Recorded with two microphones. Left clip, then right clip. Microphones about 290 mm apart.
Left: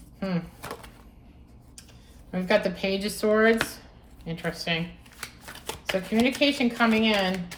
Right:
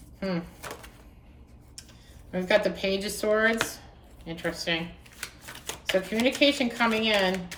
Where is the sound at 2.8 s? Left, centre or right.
Centre.